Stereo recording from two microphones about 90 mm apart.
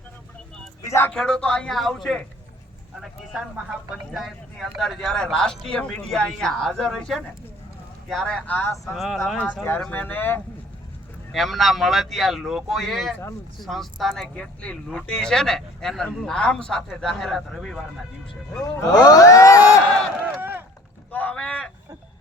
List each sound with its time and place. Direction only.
0.9 s a sound: 30° left (ahead or behind)
1.1 s speech: 10° left (ahead or behind)
8.5 s speech: 30° left (ahead or behind)
8.9 s speech: centre (ahead or behind)
9.9 s speech: 20° left (ahead or behind)
11.3 s speech: centre (ahead or behind)
18.6 s speech: 45° left (ahead or behind)
20.4 s a sound: 25° right (ahead or behind)
21.1 s vehicle: 15° left (ahead or behind)